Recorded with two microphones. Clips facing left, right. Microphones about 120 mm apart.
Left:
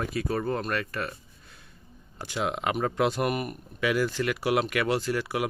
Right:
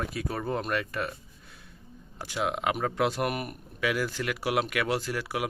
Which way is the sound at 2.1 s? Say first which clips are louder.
Even; 5° right (ahead or behind).